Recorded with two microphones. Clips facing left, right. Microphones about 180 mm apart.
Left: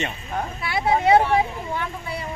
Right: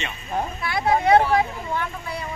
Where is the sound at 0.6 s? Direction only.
10° left (ahead or behind).